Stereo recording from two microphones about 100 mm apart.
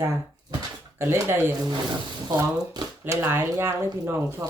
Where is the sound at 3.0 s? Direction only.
25° right (ahead or behind).